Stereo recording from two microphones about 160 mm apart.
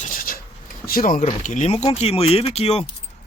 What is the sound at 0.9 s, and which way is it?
Speech, 65° left (ahead or behind).